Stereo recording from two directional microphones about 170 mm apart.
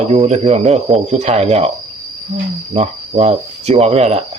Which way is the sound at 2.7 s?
40° right (ahead or behind).